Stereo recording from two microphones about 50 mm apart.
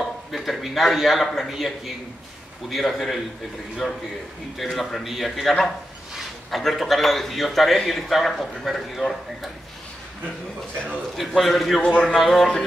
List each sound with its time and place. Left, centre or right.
0.0 s a sound: centre
2.7 s a man's voice: centre
11.1 s a man's voice: centre
11.8 s speech: left
12.2 s a man's voice: centre